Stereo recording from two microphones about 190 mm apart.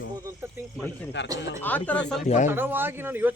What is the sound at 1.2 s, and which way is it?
Speech, 70° left (ahead or behind).